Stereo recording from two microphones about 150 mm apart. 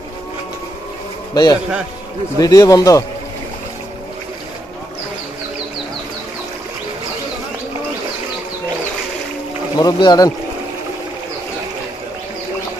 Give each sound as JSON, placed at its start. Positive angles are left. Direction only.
{"t": 1.3, "sound": "a man's voice", "side_deg": 25}
{"t": 9.8, "sound": "speech", "side_deg": 30}